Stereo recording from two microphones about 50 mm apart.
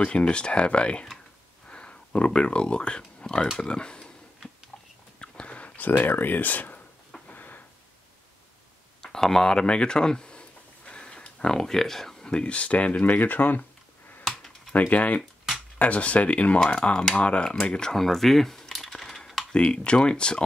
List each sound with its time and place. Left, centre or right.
0.0 s speech: left
5.2 s a sound: left
9.0 s speech: centre
10.9 s a sound: centre
12.3 s speech: left; by 19.4 s centre
19.5 s speech: centre